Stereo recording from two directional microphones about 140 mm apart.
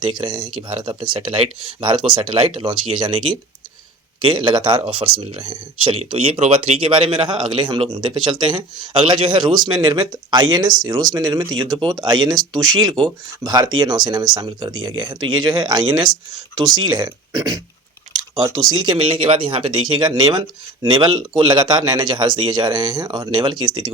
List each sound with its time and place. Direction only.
0.0 s speech: 35° right (ahead or behind)
4.2 s speech: 35° right (ahead or behind)